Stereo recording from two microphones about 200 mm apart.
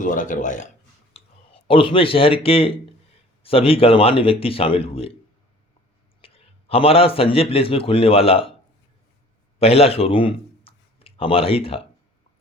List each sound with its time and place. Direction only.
0.0 s speech: 40° left (ahead or behind)
1.1 s a man's voice: 25° left (ahead or behind)
6.2 s a man's voice: 30° left (ahead or behind)
9.6 s speech: 30° left (ahead or behind)